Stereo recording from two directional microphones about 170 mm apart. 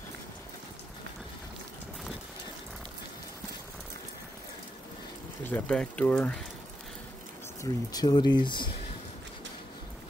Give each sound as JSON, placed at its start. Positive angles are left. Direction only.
{"t": 5.5, "sound": "speech", "side_deg": 5}
{"t": 7.6, "sound": "speech", "side_deg": 20}